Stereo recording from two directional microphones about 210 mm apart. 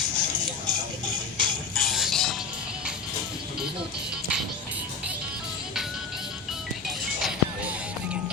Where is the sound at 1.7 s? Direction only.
Centre (ahead or behind).